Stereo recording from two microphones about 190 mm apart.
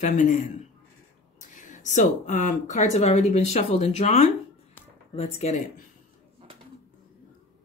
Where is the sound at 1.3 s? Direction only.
40° left (ahead or behind).